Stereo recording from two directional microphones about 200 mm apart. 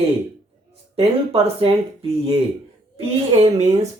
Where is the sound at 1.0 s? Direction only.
30° right (ahead or behind).